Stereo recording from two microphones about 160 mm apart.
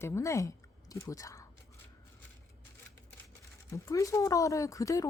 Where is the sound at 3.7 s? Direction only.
20° left (ahead or behind).